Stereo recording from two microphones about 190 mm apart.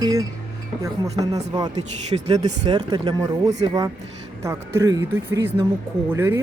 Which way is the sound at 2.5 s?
20° right (ahead or behind).